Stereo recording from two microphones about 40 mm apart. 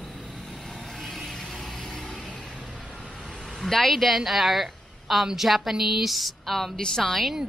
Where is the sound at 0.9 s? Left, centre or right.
Centre.